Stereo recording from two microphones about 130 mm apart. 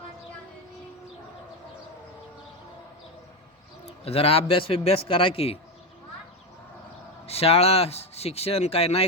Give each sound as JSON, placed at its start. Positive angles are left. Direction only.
{"t": 3.8, "sound": "speech", "side_deg": 50}
{"t": 7.3, "sound": "speech", "side_deg": 50}